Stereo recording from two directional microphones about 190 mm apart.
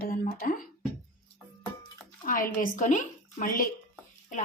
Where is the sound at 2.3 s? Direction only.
45° left (ahead or behind).